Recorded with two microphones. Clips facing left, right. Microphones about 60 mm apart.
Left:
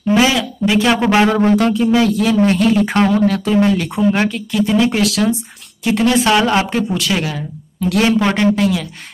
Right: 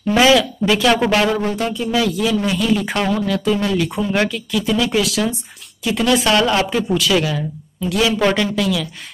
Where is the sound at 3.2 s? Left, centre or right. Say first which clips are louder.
Left 5 dB; left.